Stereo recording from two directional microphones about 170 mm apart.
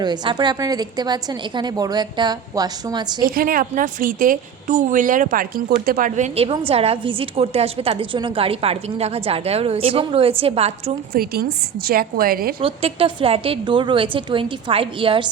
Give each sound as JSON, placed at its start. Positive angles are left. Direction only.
{"t": 0.0, "sound": "a woman's voice", "side_deg": -25}
{"t": 3.2, "sound": "a woman's voice", "side_deg": -55}
{"t": 11.1, "sound": "a woman's voice", "side_deg": -65}
{"t": 12.5, "sound": "a woman's voice", "side_deg": -35}